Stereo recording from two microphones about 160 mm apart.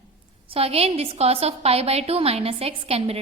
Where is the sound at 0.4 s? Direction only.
35° right (ahead or behind).